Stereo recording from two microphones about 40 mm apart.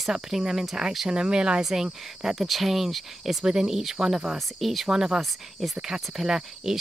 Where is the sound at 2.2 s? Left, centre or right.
Centre.